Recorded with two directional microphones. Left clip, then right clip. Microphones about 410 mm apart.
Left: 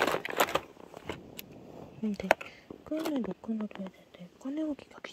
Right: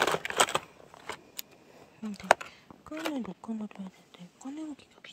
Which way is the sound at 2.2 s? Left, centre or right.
Centre.